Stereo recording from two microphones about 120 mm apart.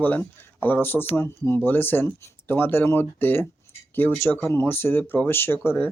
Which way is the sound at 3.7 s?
20° left (ahead or behind).